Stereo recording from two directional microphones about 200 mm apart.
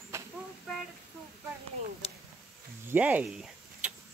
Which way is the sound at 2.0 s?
30° left (ahead or behind).